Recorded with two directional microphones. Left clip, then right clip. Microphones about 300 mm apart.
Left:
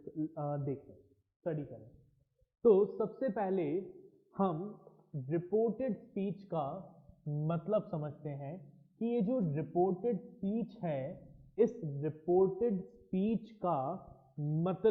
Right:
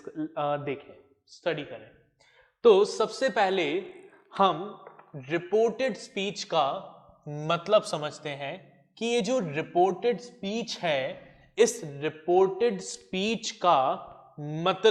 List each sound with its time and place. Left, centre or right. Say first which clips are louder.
0.2 s a woman's voice: right 10 dB; centre
6.8 s a sound: right 7 dB; right
7.4 s a woman's voice: right 11 dB; centre